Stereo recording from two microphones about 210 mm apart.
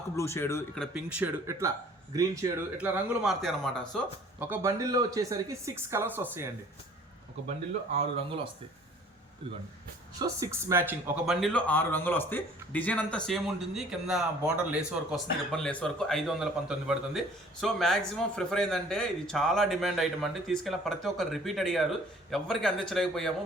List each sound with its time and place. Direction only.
0.2 s speech: 10° left (ahead or behind)
4.4 s speech: 10° right (ahead or behind)
7.9 s speech: 30° right (ahead or behind)
10.2 s speech: 15° right (ahead or behind); by 23.3 s centre (ahead or behind)